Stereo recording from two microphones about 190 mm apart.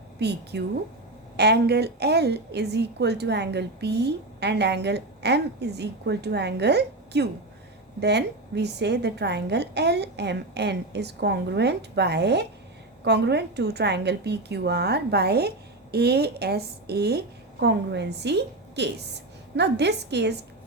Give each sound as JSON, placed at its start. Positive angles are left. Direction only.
{"t": 0.2, "sound": "a woman's voice", "side_deg": -60}